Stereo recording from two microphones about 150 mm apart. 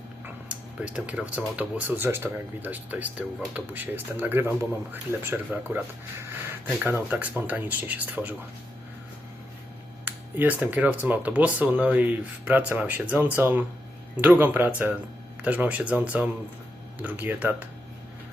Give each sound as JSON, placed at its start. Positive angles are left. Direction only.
{"t": 0.4, "sound": "speech", "side_deg": -10}
{"t": 10.1, "sound": "speech", "side_deg": -10}